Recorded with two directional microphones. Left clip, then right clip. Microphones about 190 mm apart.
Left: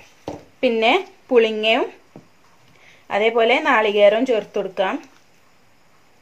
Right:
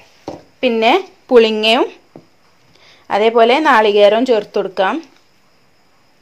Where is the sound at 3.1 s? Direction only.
40° right (ahead or behind).